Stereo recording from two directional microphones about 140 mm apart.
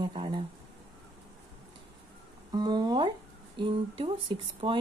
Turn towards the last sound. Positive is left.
turn(degrees=-40)  # may be behind; listen again after turning